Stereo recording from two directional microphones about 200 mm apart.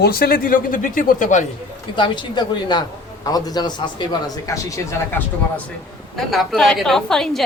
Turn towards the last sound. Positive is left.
turn(degrees=0)  # may be behind; listen again after turning